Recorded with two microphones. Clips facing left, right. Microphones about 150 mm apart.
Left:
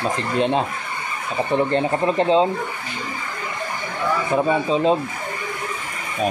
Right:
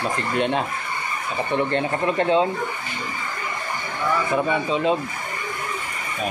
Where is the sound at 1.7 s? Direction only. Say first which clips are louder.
Left 3 dB; 25° left (ahead or behind).